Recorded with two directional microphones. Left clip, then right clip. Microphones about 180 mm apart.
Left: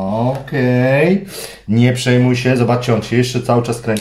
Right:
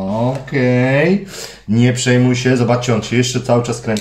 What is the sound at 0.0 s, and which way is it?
Speech, 5° left (ahead or behind).